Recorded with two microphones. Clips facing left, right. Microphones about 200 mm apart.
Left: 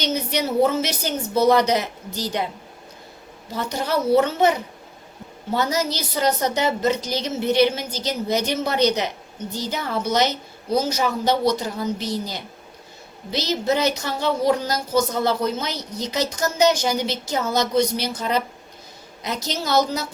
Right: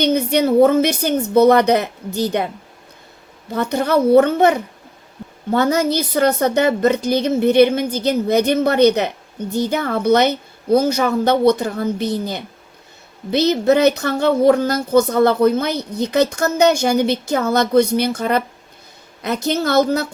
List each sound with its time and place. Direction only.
0.0 s speech: 55° right (ahead or behind)
3.5 s speech: 55° right (ahead or behind)